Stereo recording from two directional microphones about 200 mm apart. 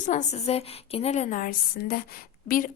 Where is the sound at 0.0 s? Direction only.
35° left (ahead or behind).